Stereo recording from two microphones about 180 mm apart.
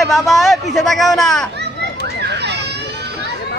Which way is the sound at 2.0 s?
70° right (ahead or behind).